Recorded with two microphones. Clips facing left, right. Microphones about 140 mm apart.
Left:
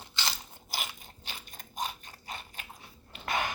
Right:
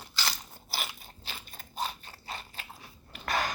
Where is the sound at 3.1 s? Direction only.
25° left (ahead or behind).